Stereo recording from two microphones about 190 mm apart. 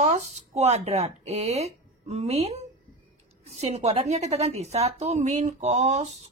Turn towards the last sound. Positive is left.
turn(degrees=-35)  # may be behind; listen again after turning